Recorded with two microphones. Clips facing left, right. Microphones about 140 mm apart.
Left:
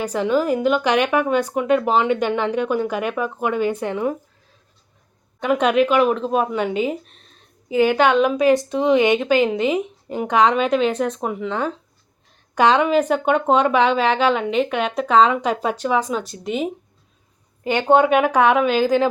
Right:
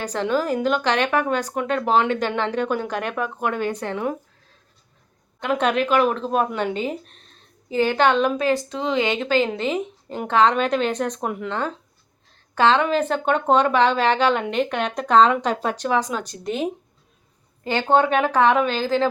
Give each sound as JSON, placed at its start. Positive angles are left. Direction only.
{"t": 0.0, "sound": "speech", "side_deg": 10}
{"t": 5.4, "sound": "speech", "side_deg": 10}
{"t": 17.6, "sound": "speech", "side_deg": 15}